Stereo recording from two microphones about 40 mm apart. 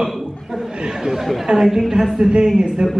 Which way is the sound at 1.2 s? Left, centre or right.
Centre.